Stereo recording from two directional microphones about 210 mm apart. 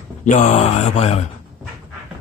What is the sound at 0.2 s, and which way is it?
Mantra, 35° left (ahead or behind).